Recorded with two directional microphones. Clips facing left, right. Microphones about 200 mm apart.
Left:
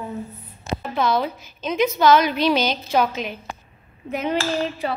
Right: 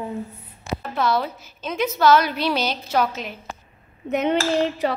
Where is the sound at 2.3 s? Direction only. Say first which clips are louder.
Left 3 dB; 15° left (ahead or behind).